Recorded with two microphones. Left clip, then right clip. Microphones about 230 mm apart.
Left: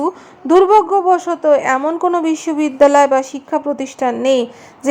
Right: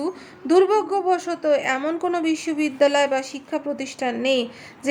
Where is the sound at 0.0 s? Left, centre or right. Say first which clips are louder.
Left 8 dB; centre.